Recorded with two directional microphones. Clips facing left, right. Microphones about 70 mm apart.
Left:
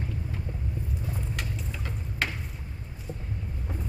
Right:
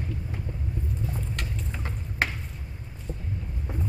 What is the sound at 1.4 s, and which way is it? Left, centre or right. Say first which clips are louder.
Vehicle: even; centre.